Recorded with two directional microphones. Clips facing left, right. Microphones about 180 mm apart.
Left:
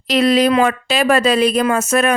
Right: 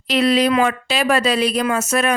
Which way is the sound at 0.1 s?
45° left (ahead or behind).